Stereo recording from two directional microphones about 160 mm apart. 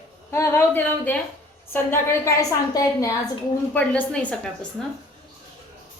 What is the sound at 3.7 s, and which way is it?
Speech, 10° left (ahead or behind).